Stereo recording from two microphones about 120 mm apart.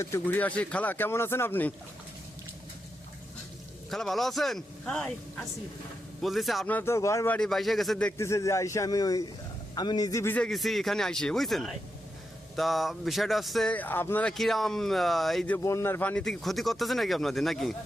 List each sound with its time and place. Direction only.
0.0 s speech: 20° left (ahead or behind)
3.8 s speech: centre (ahead or behind)
6.7 s speech: 15° left (ahead or behind)
6.9 s speech: 25° left (ahead or behind)
7.3 s speech: 5° left (ahead or behind)
8.2 s a man's voice: 25° left (ahead or behind)
10.3 s speech: 5° left (ahead or behind)
13.7 s speech: 15° left (ahead or behind)
14.3 s speech: centre (ahead or behind)
15.5 s speech: 25° left (ahead or behind); by 17.7 s centre (ahead or behind)